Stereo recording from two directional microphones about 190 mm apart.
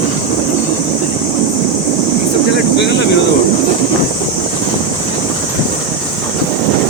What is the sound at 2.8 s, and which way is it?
Speech, 65° left (ahead or behind).